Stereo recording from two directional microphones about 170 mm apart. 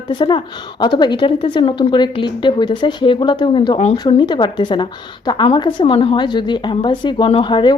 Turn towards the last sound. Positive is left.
turn(degrees=25)  # may be behind; listen again after turning